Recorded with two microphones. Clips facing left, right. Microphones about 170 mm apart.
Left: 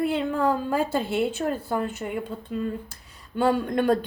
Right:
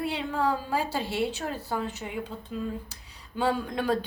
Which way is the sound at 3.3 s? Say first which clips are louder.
Left 5 dB; 60° left (ahead or behind).